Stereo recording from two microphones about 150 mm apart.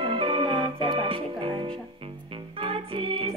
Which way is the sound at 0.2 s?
40° right (ahead or behind).